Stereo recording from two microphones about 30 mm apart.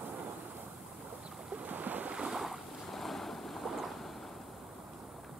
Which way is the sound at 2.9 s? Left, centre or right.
Centre.